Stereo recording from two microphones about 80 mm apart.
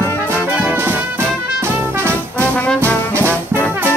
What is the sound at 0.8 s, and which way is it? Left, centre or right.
Music, right.